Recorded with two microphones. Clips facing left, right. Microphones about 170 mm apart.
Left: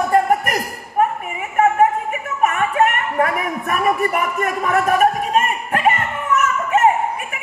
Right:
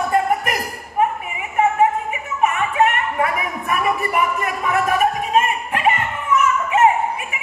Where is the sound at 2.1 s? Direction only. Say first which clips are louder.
Left 1 dB; 45° left (ahead or behind).